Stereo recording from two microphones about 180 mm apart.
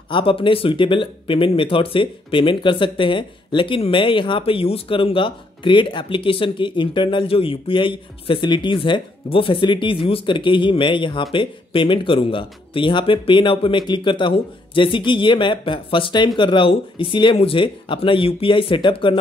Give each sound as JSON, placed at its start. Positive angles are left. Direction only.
{"t": 0.1, "sound": "speech", "side_deg": 30}